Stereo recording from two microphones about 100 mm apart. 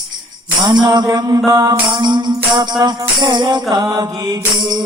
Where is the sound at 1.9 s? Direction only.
50° right (ahead or behind).